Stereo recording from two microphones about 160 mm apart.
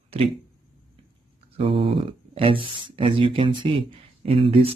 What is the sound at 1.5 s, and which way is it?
Speech, 35° right (ahead or behind).